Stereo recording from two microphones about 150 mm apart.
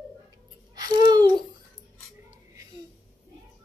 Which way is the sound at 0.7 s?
25° right (ahead or behind).